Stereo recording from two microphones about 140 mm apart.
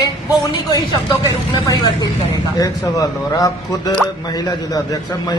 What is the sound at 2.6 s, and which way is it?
A man's voice, 25° left (ahead or behind).